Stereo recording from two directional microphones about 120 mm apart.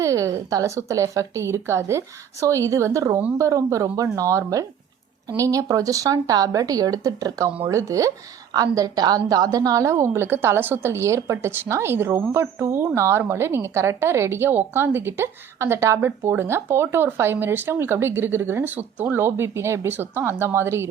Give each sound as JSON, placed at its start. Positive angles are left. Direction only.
{"t": 0.0, "sound": "a woman's voice", "side_deg": -25}